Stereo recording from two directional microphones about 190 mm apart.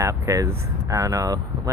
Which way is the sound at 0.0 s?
15° right (ahead or behind).